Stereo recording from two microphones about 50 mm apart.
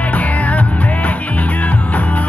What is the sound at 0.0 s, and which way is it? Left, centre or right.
Music, left.